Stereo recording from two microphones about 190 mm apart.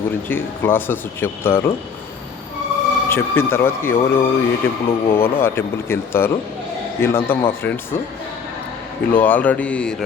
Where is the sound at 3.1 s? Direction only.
10° left (ahead or behind).